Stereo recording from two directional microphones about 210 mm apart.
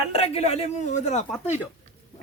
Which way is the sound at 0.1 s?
30° left (ahead or behind).